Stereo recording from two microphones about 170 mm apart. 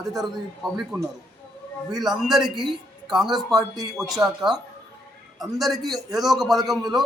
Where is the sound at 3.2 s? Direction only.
25° right (ahead or behind).